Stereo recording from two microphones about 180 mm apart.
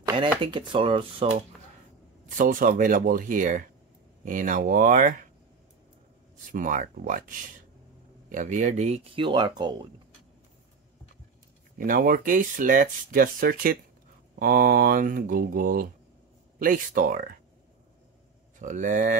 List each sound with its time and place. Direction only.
0.0 s a sound: 25° right (ahead or behind)
0.4 s speech: 25° right (ahead or behind)
2.2 s speech: 45° right (ahead or behind)
6.5 s speech: 45° right (ahead or behind); by 9.8 s 25° right (ahead or behind)
11.8 s speech: 50° right (ahead or behind)
18.6 s speech: 45° right (ahead or behind)